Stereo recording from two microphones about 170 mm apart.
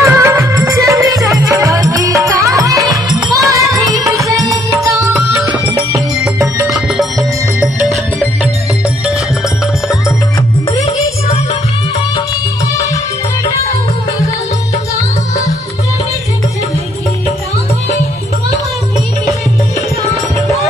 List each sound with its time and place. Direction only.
0.0 s music: 15° right (ahead or behind)
6.7 s music: centre (ahead or behind)